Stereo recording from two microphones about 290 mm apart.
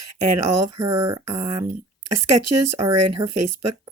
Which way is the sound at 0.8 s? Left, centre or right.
Centre.